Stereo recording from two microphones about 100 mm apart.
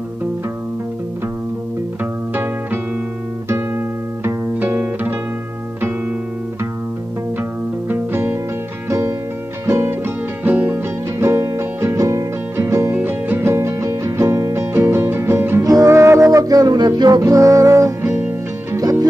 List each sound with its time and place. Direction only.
3.4 s music: 25° right (ahead or behind)
7.9 s music: 20° right (ahead or behind)
9.7 s music: 25° right (ahead or behind)
15.6 s music: 35° right (ahead or behind)
17.2 s music: 30° right (ahead or behind)